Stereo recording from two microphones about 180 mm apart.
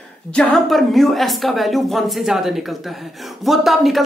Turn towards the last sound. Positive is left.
turn(degrees=0)  # may be behind; listen again after turning